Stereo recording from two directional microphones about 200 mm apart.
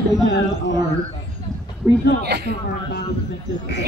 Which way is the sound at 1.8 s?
15° right (ahead or behind).